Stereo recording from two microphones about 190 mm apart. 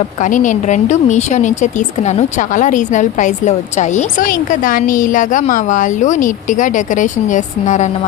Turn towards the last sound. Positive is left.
turn(degrees=40)  # may be behind; listen again after turning